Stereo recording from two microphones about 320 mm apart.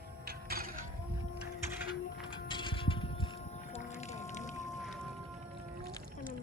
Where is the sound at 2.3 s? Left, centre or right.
Centre.